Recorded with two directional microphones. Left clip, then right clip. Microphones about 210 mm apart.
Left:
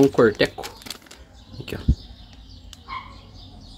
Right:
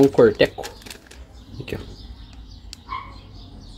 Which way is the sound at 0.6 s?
20° left (ahead or behind).